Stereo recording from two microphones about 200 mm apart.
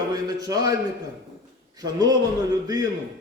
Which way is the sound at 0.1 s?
20° right (ahead or behind).